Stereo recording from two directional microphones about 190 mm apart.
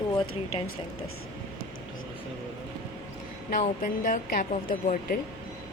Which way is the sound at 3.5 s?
45° left (ahead or behind).